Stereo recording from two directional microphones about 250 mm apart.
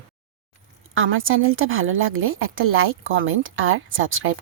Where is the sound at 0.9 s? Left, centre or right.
Right.